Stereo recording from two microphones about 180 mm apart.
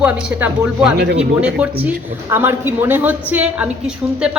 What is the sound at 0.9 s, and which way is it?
Speech, 65° right (ahead or behind).